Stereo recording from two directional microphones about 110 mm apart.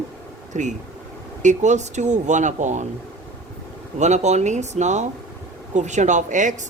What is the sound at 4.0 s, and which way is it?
Speech, 90° right.